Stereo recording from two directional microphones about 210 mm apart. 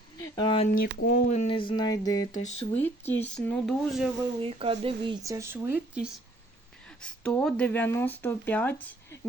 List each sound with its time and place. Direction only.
0.2 s a sound: 20° left (ahead or behind)
0.8 s speech: 45° left (ahead or behind)
1.3 s a sound: 30° left (ahead or behind)
2.3 s speech: 35° left (ahead or behind)
2.7 s speech: 10° left (ahead or behind)
4.4 s speech: 30° right (ahead or behind)
5.2 s speech: 15° right (ahead or behind)
7.0 s speech: 5° left (ahead or behind)